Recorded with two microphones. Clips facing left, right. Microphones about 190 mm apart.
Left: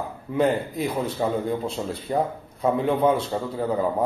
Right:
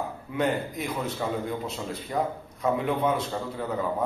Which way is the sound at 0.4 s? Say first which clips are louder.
Left 5 dB; 30° left (ahead or behind).